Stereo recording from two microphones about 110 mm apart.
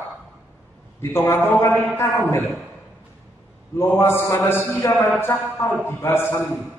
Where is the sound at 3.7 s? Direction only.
25° left (ahead or behind).